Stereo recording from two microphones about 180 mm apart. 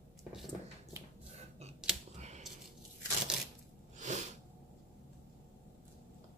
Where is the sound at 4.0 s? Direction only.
40° right (ahead or behind).